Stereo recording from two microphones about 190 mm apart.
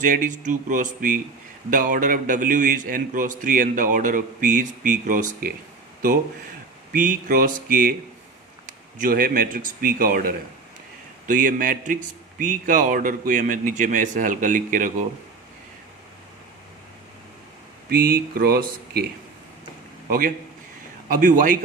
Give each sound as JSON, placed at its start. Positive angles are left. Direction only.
{"t": 0.0, "sound": "a man's voice", "side_deg": -45}
{"t": 6.9, "sound": "a man's voice", "side_deg": -45}
{"t": 17.8, "sound": "a man's voice", "side_deg": -50}
{"t": 20.1, "sound": "a man's voice", "side_deg": -45}